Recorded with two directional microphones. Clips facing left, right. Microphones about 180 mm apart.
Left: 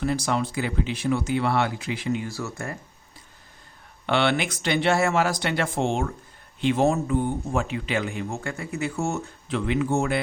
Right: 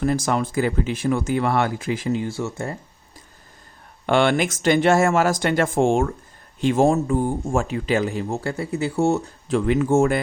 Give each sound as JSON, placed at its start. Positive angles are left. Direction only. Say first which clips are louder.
{"t": 0.0, "sound": "speech", "louder": "right 4 dB", "side_deg": -45}
{"t": 4.0, "sound": "speech", "louder": "right 5 dB", "side_deg": -45}